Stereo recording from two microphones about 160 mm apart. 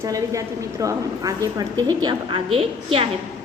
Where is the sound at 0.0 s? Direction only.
20° right (ahead or behind).